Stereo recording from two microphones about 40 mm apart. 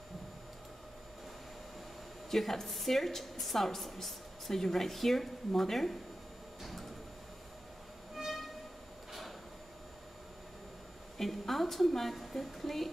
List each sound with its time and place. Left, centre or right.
2.3 s a woman's voice: centre
6.6 s music: centre
8.2 s music: centre
11.1 s a woman's voice: centre